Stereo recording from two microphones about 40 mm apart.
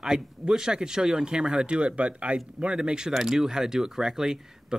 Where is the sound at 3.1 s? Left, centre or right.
Centre.